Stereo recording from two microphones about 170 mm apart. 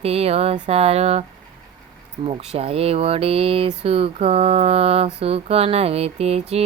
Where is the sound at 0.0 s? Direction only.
35° right (ahead or behind).